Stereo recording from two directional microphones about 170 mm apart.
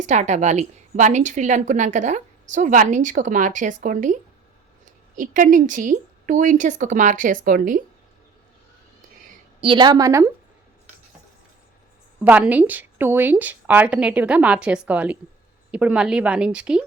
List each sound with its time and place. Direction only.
0.0 s a woman's voice: 45° right (ahead or behind)
9.6 s a woman's voice: 30° right (ahead or behind)
12.2 s a woman's voice: 10° right (ahead or behind)